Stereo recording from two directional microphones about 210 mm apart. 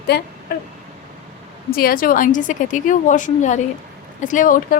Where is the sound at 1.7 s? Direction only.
45° left (ahead or behind).